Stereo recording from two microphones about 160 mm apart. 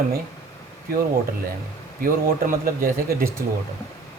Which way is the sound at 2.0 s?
60° right (ahead or behind).